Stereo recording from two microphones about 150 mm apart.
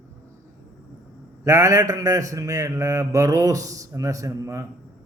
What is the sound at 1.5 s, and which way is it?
A man's voice, 20° right (ahead or behind).